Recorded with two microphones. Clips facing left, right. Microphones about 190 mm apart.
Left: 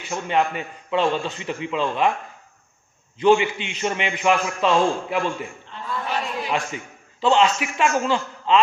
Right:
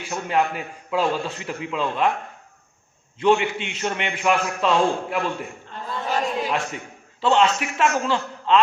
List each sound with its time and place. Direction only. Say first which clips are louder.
0.1 s a man's voice: left 1 dB; centre (ahead or behind)
3.2 s a man's voice: left 2 dB; centre (ahead or behind)
5.7 s a sound: right 1 dB; 45° right (ahead or behind)
6.5 s a man's voice: even; centre (ahead or behind)